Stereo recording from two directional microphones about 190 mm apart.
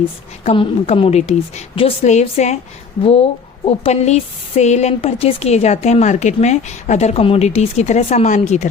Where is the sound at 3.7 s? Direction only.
35° left (ahead or behind).